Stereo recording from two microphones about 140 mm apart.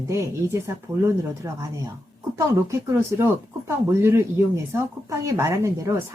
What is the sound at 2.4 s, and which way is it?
Speech, 20° right (ahead or behind).